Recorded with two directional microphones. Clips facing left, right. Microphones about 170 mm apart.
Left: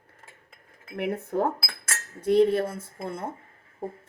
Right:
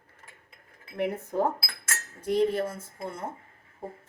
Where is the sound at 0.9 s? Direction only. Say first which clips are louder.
Left 1 dB; 60° left (ahead or behind).